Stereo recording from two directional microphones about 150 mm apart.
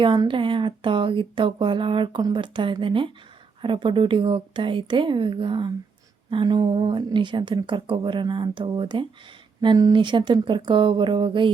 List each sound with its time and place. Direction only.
0.0 s speech: 30° right (ahead or behind)